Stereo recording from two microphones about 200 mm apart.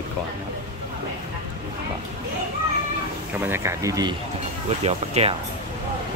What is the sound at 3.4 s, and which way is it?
Speech, 10° right (ahead or behind).